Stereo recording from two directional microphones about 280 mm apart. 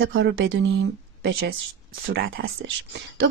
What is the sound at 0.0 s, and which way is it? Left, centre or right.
Speech, right.